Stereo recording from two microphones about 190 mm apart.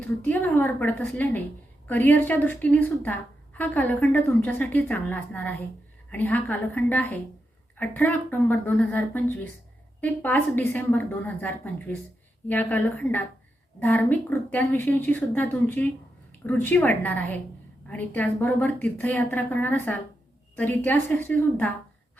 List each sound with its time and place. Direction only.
0.0 s a woman's voice: 10° left (ahead or behind)